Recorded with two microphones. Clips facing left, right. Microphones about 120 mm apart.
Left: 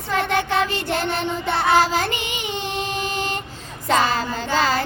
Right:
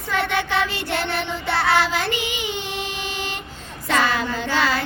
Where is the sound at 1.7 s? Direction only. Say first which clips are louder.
Left 5 dB; 40° left (ahead or behind).